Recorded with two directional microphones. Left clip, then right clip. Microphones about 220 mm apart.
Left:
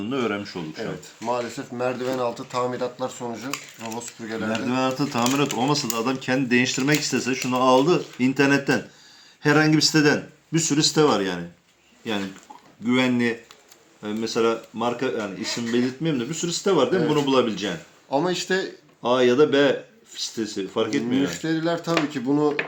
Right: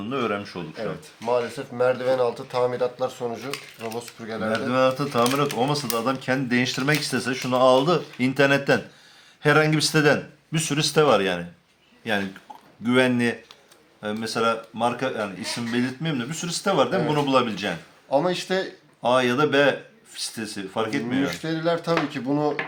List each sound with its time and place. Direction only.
0.0 s speech: 15° right (ahead or behind)
4.4 s speech: 10° right (ahead or behind); by 11.4 s 40° right (ahead or behind)
12.8 s speech: 50° right (ahead or behind)
18.1 s speech: 10° right (ahead or behind)
19.0 s speech: 45° right (ahead or behind)
21.2 s speech: 10° right (ahead or behind)